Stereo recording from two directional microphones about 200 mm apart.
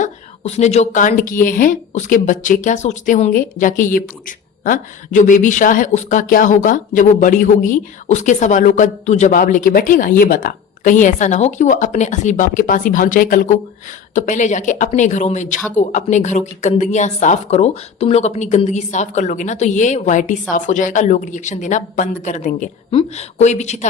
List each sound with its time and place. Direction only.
0.0 s a woman's voice: 35° left (ahead or behind)